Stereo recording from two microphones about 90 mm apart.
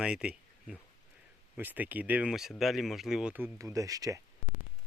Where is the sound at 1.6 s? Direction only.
20° right (ahead or behind); by 3.3 s 5° right (ahead or behind).